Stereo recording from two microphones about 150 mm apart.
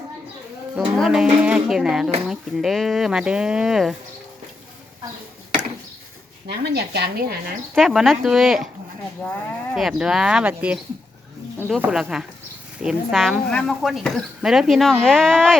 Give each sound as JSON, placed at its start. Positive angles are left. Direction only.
{"t": 0.8, "sound": "speech", "side_deg": 0}
{"t": 6.5, "sound": "speech", "side_deg": -90}
{"t": 7.8, "sound": "speech", "side_deg": 0}
{"t": 9.2, "sound": "speech", "side_deg": 10}
{"t": 9.7, "sound": "speech", "side_deg": 0}
{"t": 11.8, "sound": "speech", "side_deg": -5}